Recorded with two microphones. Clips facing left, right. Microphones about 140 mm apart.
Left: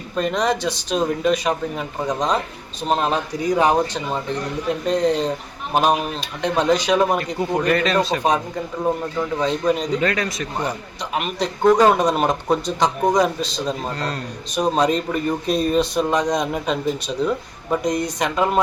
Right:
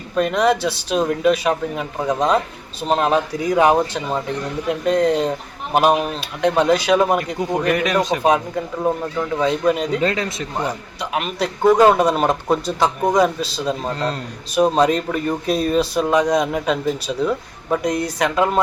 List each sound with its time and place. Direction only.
0.2 s speech: 5° right (ahead or behind)
10.0 s a man's voice: 25° right (ahead or behind)
11.2 s speech: 5° right (ahead or behind)
13.9 s a man's voice: 20° right (ahead or behind)
14.5 s speech: 5° right (ahead or behind)